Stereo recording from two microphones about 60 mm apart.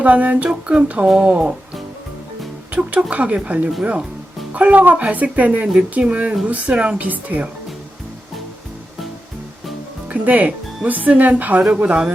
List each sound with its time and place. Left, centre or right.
0.0 s speech: right
2.7 s speech: right
10.1 s speech: right